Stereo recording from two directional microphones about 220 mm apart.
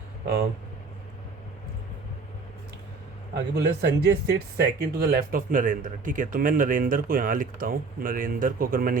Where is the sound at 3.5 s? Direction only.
50° right (ahead or behind).